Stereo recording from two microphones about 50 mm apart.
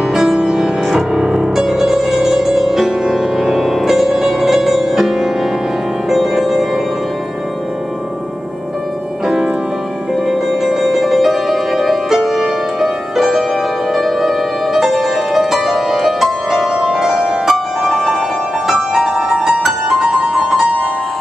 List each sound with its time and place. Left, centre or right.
0.1 s music: centre
10.2 s music: centre